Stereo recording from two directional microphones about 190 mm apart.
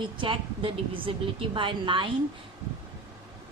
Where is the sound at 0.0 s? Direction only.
25° right (ahead or behind).